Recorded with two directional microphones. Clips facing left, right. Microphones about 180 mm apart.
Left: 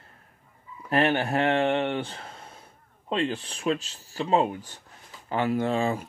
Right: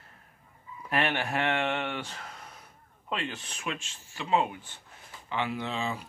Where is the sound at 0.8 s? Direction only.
30° left (ahead or behind).